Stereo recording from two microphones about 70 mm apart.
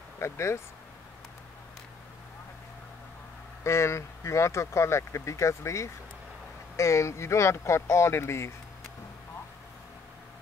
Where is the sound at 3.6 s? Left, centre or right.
Left.